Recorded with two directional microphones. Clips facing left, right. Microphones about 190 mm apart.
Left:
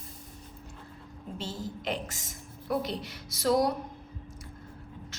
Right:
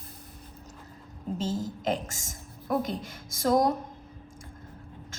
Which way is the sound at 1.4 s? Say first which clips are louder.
Right 5 dB; 45° right (ahead or behind).